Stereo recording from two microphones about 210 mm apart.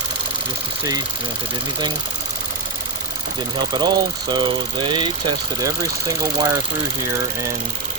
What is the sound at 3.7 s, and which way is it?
Speech, 20° right (ahead or behind).